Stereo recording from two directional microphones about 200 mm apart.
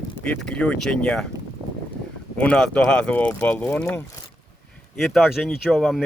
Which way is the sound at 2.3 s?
5° left (ahead or behind).